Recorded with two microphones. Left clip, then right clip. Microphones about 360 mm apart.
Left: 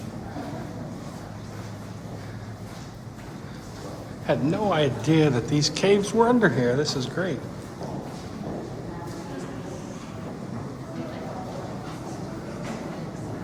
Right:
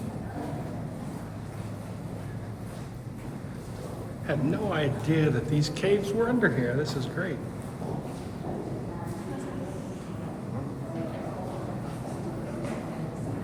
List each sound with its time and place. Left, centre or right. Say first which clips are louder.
4.3 s speech: left 6 dB; centre